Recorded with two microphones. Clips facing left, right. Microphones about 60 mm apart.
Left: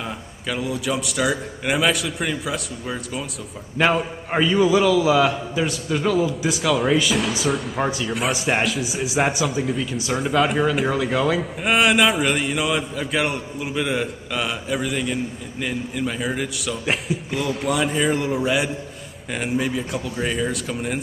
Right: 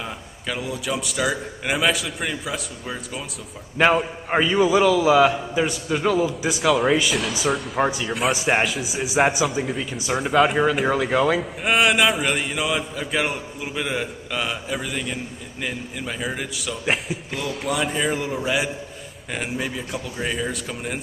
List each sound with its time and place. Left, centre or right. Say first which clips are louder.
0.5 s a man's voice: left 2 dB; centre